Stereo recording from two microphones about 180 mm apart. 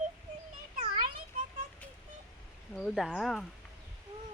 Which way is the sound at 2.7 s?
Centre (ahead or behind).